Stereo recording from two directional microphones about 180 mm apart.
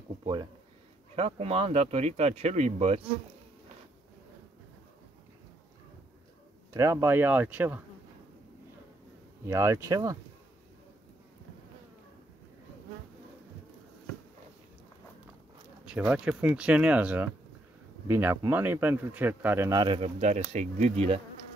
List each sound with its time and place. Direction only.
0.2 s speech: 25° right (ahead or behind)
6.7 s speech: 15° right (ahead or behind)
9.5 s speech: 15° right (ahead or behind)
15.9 s speech: 5° right (ahead or behind)
19.8 s speech: 30° right (ahead or behind)